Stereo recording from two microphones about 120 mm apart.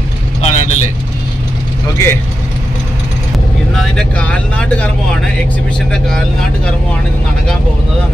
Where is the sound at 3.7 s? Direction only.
5° left (ahead or behind).